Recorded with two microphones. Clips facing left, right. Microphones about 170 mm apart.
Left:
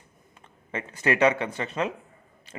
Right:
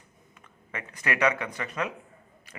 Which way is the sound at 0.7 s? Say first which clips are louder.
Left 6 dB; 25° left (ahead or behind).